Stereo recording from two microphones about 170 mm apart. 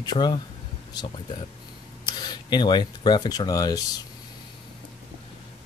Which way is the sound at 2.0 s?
25° left (ahead or behind).